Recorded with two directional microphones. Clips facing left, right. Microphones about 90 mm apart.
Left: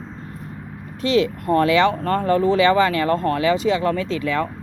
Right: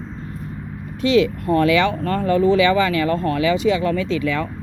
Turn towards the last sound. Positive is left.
turn(degrees=35)  # may be behind; listen again after turning